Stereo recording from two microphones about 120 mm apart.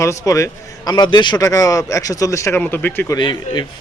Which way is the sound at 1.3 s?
30° left (ahead or behind).